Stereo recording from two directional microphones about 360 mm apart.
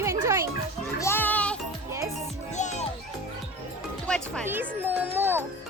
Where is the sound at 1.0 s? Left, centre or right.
Centre.